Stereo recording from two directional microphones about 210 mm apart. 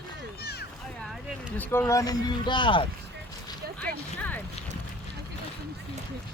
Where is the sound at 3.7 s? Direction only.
5° left (ahead or behind).